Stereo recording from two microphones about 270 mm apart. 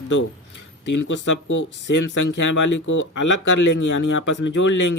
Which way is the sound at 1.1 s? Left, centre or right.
Left.